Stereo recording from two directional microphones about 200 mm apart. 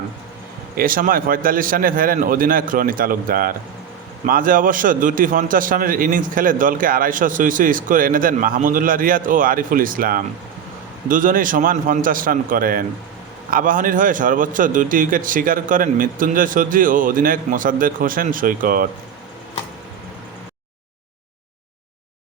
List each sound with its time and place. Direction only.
0.8 s a man's voice: 45° right (ahead or behind)